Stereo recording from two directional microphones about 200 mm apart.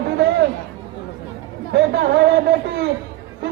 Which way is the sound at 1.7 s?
55° right (ahead or behind).